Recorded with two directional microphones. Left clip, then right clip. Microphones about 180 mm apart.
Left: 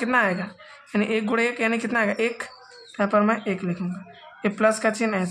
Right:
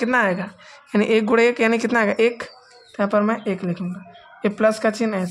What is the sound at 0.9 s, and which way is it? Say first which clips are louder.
Speech: right 6 dB; 45° right (ahead or behind).